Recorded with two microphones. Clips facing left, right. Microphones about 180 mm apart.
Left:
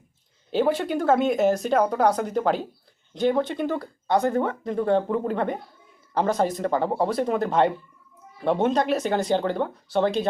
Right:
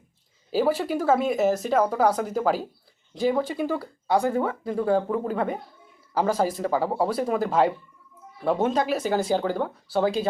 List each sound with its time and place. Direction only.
0.5 s speech: 5° right (ahead or behind)